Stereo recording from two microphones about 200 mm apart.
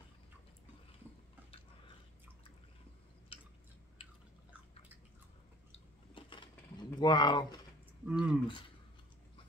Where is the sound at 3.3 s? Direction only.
25° left (ahead or behind).